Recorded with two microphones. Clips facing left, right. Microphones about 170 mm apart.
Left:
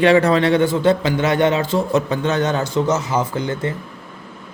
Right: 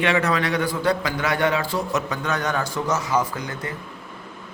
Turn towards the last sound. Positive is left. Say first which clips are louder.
# left 6 dB
turn(degrees=25)  # may be behind; listen again after turning